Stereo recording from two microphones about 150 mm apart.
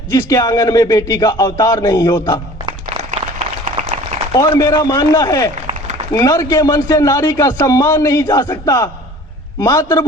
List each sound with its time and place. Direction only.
0.1 s a man's voice: 20° left (ahead or behind)
2.6 s applause: 45° right (ahead or behind)
3.8 s a sound: 50° right (ahead or behind)
4.4 s a man's voice: 20° left (ahead or behind)